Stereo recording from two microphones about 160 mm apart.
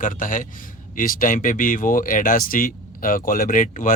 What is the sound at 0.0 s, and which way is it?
Speech, 55° left (ahead or behind).